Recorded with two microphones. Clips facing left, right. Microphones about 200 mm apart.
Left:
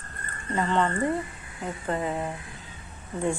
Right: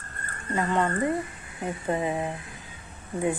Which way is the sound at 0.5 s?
10° right (ahead or behind).